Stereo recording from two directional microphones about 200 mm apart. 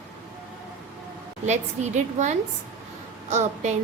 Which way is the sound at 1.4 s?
35° right (ahead or behind).